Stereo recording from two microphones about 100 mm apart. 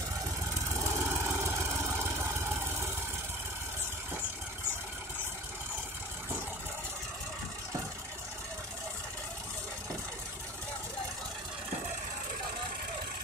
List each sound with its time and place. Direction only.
0.9 s vehicle: 25° right (ahead or behind)